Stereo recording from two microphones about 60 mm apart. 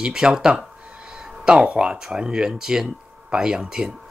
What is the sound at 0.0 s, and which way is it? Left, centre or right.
Speech, centre.